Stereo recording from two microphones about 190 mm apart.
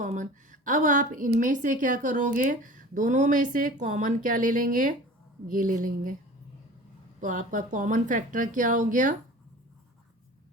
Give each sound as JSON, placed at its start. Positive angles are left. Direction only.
{"t": 0.0, "sound": "a woman's voice", "side_deg": -40}
{"t": 7.2, "sound": "a woman's voice", "side_deg": -45}